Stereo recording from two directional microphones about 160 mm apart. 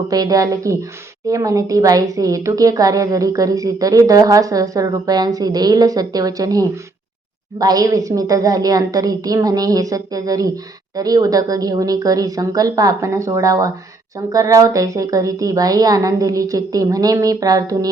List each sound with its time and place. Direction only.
0.1 s a woman's voice: 25° right (ahead or behind)